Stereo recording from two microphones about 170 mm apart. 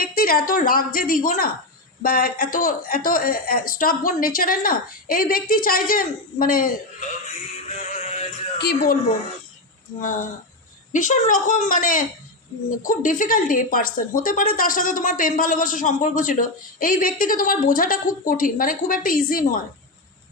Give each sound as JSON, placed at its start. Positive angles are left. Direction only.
{"t": 0.0, "sound": "speech", "side_deg": 60}
{"t": 7.3, "sound": "synthetic singing", "side_deg": 40}
{"t": 8.5, "sound": "speech", "side_deg": 70}
{"t": 10.0, "sound": "speech", "side_deg": 50}